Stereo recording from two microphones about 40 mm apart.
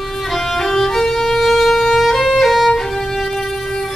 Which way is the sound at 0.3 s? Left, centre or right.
Centre.